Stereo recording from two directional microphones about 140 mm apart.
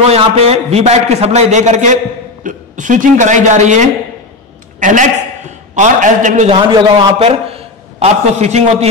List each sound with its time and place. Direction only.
0.0 s a man's voice: 45° right (ahead or behind); by 6.5 s 65° right (ahead or behind)
6.5 s a man's voice: 40° right (ahead or behind)